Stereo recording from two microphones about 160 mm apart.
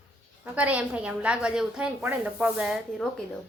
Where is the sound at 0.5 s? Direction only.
10° right (ahead or behind).